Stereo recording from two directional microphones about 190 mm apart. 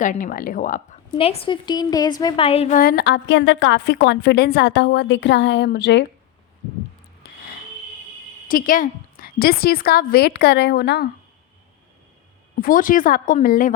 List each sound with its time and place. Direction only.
0.0 s a woman's voice: 45° left (ahead or behind)
1.1 s a woman's voice: 30° left (ahead or behind)
2.7 s a woman's voice: 55° left (ahead or behind)
8.4 s a woman's voice: 45° left (ahead or behind)
12.5 s a woman's voice: 45° left (ahead or behind)